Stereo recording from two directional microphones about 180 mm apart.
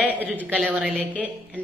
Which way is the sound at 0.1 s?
10° right (ahead or behind).